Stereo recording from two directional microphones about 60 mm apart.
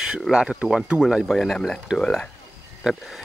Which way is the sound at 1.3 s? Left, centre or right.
Centre.